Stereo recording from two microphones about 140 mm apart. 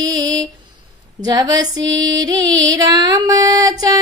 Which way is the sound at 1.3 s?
30° right (ahead or behind).